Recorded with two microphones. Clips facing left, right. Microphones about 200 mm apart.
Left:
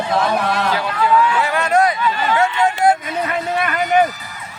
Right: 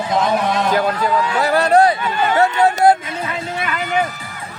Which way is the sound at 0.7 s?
45° right (ahead or behind).